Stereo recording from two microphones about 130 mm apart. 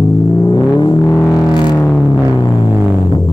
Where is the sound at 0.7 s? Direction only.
35° left (ahead or behind).